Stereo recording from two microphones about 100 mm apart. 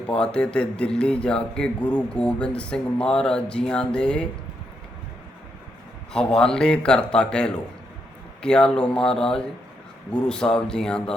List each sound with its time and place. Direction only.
0.1 s speech: 10° left (ahead or behind)
6.1 s speech: 5° left (ahead or behind)